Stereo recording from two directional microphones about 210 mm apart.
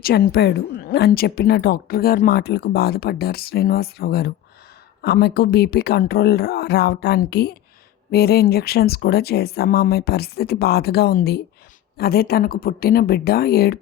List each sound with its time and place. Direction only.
0.0 s speech: 45° left (ahead or behind)